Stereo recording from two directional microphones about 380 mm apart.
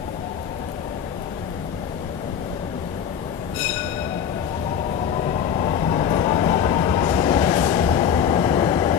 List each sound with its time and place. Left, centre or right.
5.7 s train: centre